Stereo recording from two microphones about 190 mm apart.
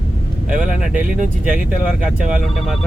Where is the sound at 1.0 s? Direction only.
45° right (ahead or behind).